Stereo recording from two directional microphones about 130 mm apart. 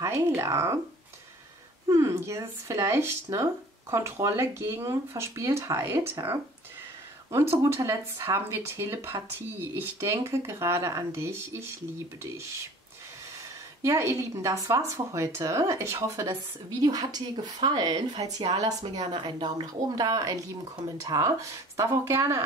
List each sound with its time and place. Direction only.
0.3 s speech: 20° right (ahead or behind)
1.9 s speech: 20° right (ahead or behind)
7.6 s speech: 25° right (ahead or behind)
13.8 s a woman's voice: 25° right (ahead or behind)
18.7 s speech: 60° right (ahead or behind)
19.1 s speech: 35° right (ahead or behind)